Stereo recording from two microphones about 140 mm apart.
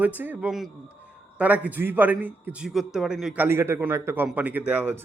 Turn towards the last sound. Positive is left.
turn(degrees=-15)  # may be behind; listen again after turning